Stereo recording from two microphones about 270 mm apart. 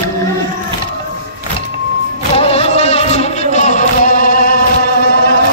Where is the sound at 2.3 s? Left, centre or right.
Left.